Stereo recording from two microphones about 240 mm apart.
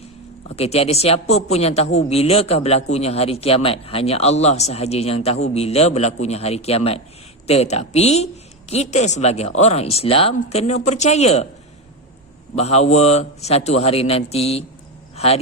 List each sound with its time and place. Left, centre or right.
0.4 s a man's voice: left
12.5 s a man's voice: left
15.1 s a sound: left